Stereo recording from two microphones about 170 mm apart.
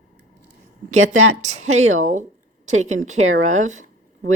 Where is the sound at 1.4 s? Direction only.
45° right (ahead or behind).